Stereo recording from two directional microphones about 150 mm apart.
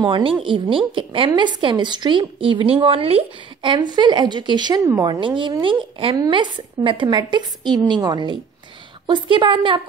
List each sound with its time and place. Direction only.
0.0 s a woman's voice: 35° right (ahead or behind)